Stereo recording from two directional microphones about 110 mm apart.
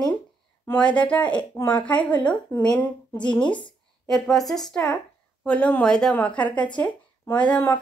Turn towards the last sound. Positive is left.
turn(degrees=15)  # may be behind; listen again after turning